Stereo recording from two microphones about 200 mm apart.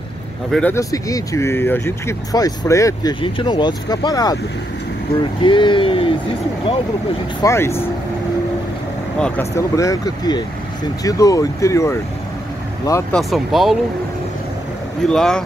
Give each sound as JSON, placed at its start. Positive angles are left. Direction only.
{"t": 0.5, "sound": "speech", "side_deg": 5}
{"t": 0.7, "sound": "speech", "side_deg": 15}
{"t": 5.4, "sound": "speech", "side_deg": 25}
{"t": 7.4, "sound": "speech", "side_deg": 15}
{"t": 9.2, "sound": "speech", "side_deg": 15}
{"t": 13.1, "sound": "speech", "side_deg": 0}
{"t": 15.0, "sound": "speech", "side_deg": 5}